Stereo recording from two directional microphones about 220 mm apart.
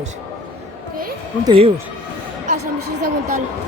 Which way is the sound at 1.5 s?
25° right (ahead or behind).